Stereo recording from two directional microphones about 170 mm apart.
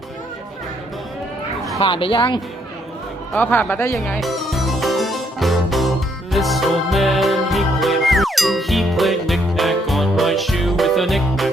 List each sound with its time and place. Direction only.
1.8 s a woman's voice: 30° left (ahead or behind)
3.3 s speech: 10° left (ahead or behind)
3.9 s music: 5° left (ahead or behind)